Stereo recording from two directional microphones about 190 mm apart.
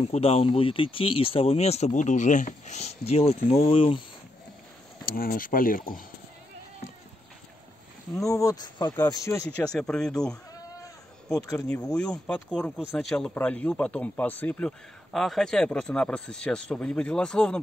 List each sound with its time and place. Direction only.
0.0 s speech: 30° left (ahead or behind)
5.0 s speech: 50° left (ahead or behind)
8.2 s speech: 15° left (ahead or behind)
9.7 s speech: 5° left (ahead or behind)
11.3 s speech: 15° left (ahead or behind)
11.7 s speech: 5° left (ahead or behind)